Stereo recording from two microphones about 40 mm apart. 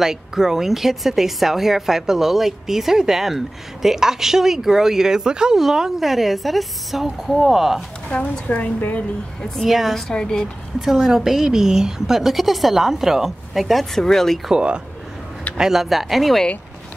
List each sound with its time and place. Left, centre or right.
0.0 s a woman's voice: centre
8.1 s a woman's voice: left
9.7 s a woman's voice: centre
10.1 s speech: centre
10.9 s speech: centre
14.5 s speech: right
15.5 s a woman's voice: centre